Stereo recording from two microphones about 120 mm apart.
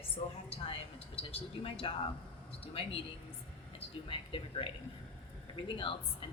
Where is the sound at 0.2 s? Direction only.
60° left (ahead or behind).